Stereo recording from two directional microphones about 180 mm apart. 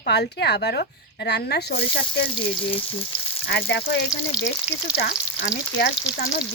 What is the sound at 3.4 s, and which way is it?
Speech, 70° left (ahead or behind).